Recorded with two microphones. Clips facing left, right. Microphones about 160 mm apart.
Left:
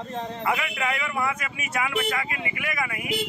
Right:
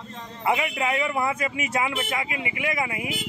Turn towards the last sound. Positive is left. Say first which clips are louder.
# right 3 dB
turn(degrees=-25)  # may be behind; listen again after turning